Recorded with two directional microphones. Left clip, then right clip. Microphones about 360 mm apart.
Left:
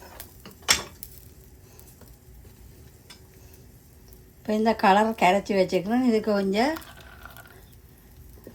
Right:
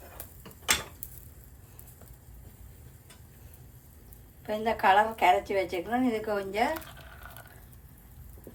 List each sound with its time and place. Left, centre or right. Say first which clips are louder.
4.4 s speech: left 4 dB; centre